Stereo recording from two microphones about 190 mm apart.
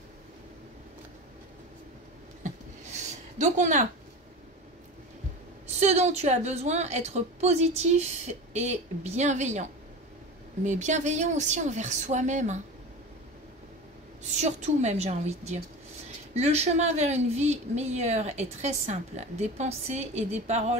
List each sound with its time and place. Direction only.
3.3 s speech: 40° right (ahead or behind)
5.8 s speech: 35° right (ahead or behind)
14.2 s speech: 35° right (ahead or behind)